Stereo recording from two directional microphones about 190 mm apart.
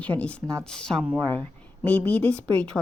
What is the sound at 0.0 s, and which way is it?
Speech, 5° left (ahead or behind).